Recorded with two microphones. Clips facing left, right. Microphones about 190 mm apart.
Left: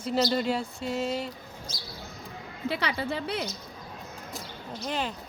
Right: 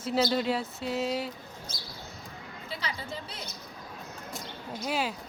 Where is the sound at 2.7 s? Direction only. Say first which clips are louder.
Left 6 dB; 70° left (ahead or behind).